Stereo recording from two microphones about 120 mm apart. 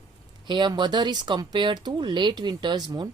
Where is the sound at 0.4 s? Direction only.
40° right (ahead or behind).